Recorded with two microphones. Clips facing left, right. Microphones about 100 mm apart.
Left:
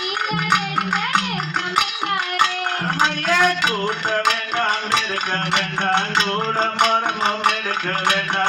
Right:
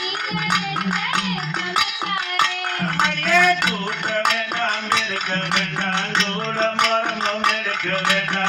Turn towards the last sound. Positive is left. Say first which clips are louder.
# left 2 dB
turn(degrees=50)  # may be behind; listen again after turning